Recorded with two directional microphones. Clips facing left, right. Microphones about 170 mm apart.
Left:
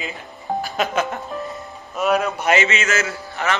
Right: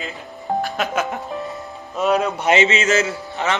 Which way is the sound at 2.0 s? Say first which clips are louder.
Right 1 dB; 20° right (ahead or behind).